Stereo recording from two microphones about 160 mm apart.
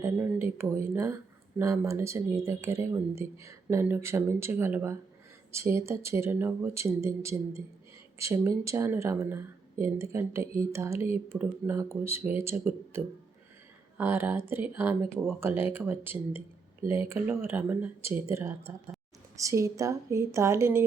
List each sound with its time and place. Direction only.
0.0 s a woman's voice: 15° right (ahead or behind)
14.0 s a woman's voice: 15° right (ahead or behind)